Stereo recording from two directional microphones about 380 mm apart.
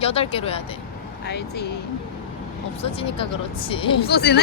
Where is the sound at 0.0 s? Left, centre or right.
Centre.